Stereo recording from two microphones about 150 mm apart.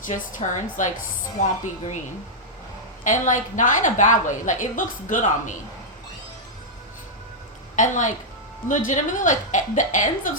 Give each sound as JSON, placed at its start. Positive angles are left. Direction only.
{"t": 0.0, "sound": "a woman's voice", "side_deg": 60}
{"t": 3.0, "sound": "a woman's voice", "side_deg": 55}
{"t": 7.8, "sound": "a woman's voice", "side_deg": 55}